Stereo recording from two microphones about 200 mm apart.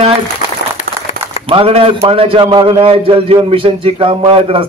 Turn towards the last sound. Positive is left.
turn(degrees=-25)  # may be behind; listen again after turning